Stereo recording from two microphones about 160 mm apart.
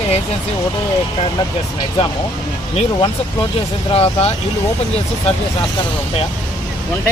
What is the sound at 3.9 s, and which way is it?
Speech, 40° left (ahead or behind).